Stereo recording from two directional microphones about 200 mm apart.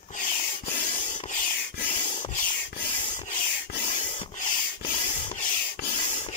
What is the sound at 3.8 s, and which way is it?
Rub, 35° left (ahead or behind).